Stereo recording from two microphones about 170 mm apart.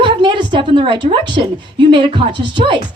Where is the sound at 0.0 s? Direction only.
30° right (ahead or behind).